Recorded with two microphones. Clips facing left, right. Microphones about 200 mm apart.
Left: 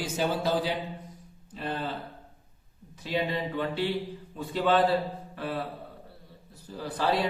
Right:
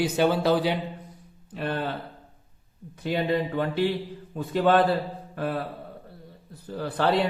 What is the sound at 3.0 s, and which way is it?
A man's voice, 50° right (ahead or behind).